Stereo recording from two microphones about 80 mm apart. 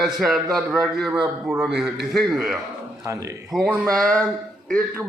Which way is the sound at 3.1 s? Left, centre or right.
Right.